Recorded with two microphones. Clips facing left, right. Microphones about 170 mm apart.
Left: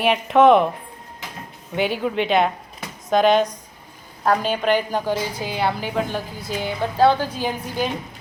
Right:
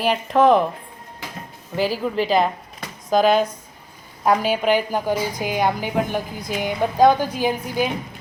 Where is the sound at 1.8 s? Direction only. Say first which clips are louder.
Even; centre (ahead or behind).